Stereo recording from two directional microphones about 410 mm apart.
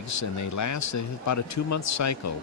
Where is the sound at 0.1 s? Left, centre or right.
Left.